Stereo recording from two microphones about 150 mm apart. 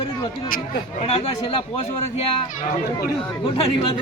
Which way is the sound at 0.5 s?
50° left (ahead or behind).